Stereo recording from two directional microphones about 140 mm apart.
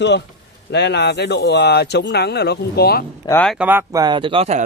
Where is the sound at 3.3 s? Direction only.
30° left (ahead or behind).